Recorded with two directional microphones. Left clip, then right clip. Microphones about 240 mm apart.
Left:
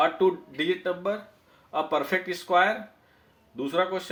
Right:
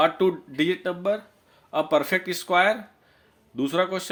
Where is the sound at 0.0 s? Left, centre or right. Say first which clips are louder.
Right 2 dB; right.